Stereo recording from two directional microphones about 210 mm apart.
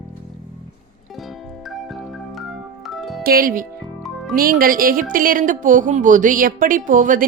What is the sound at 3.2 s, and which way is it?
Speech, 45° right (ahead or behind).